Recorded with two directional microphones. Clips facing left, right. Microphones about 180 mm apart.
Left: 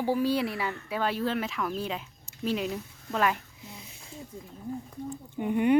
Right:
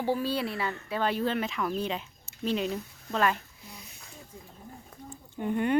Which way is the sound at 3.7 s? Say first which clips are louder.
Left 1 dB; 25° left (ahead or behind).